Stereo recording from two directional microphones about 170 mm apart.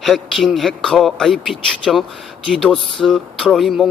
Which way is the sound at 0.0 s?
Centre (ahead or behind).